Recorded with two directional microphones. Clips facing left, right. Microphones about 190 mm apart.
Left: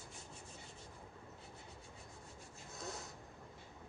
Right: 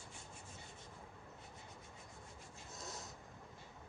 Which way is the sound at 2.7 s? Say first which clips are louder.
Left 4 dB; 60° left (ahead or behind).